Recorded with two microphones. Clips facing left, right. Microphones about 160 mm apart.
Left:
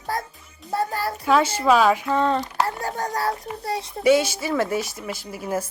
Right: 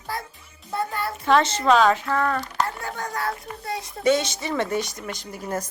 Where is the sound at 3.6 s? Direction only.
30° left (ahead or behind).